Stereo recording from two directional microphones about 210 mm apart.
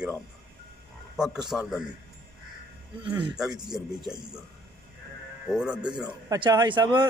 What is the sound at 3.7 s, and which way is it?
Speech, 5° right (ahead or behind).